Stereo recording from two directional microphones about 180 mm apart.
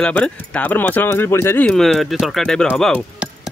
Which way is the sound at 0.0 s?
5° left (ahead or behind).